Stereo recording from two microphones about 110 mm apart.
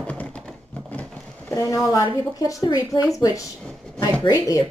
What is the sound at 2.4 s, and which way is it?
A woman's voice, 35° left (ahead or behind).